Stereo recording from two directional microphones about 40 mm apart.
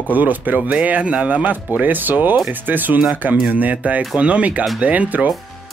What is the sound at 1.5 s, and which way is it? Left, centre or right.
Speech, right.